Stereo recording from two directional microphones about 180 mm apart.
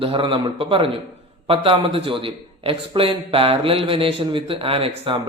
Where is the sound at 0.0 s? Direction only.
30° right (ahead or behind).